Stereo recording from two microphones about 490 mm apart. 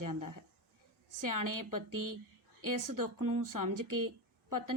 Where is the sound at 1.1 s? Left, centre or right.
Right.